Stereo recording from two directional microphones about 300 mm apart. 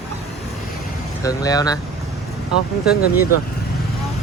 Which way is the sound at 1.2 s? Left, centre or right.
Centre.